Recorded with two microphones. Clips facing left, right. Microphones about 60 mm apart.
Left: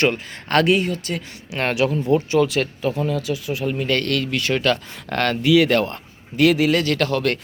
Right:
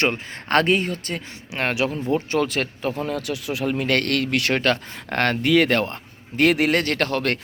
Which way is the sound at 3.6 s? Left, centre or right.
Right.